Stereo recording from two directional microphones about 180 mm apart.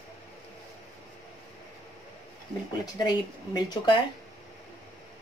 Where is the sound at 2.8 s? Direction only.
20° left (ahead or behind).